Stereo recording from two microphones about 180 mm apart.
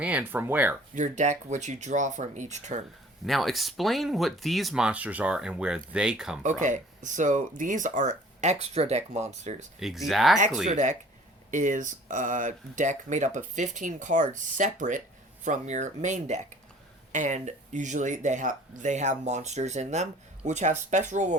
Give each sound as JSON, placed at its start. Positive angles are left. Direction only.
{"t": 0.0, "sound": "speech", "side_deg": -10}
{"t": 0.9, "sound": "speech", "side_deg": -40}
{"t": 3.2, "sound": "speech", "side_deg": 0}
{"t": 6.4, "sound": "speech", "side_deg": -45}
{"t": 9.8, "sound": "speech", "side_deg": 0}
{"t": 10.7, "sound": "speech", "side_deg": -40}